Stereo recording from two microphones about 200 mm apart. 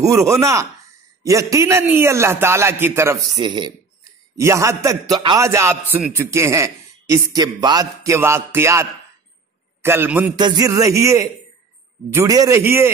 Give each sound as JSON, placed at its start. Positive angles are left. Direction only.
{"t": 0.0, "sound": "a man's voice", "side_deg": -15}
{"t": 10.3, "sound": "a man's voice", "side_deg": -20}